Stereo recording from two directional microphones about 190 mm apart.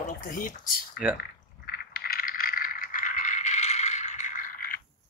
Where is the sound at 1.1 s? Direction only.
55° left (ahead or behind).